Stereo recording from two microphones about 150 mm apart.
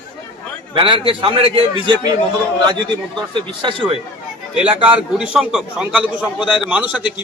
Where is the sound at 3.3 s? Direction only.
35° right (ahead or behind).